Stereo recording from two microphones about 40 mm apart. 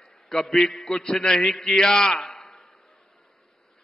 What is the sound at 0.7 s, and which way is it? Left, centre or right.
Speech, centre.